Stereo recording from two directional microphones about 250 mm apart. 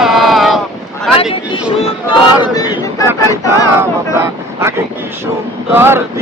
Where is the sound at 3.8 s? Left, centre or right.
Centre.